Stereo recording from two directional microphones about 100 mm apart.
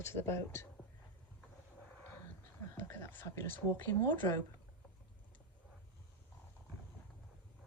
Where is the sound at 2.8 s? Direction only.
25° left (ahead or behind).